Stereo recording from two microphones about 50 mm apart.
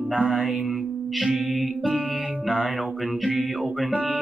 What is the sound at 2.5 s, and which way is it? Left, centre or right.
Music, right.